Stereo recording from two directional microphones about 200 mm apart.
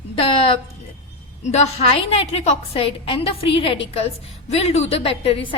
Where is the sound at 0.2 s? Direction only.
25° left (ahead or behind).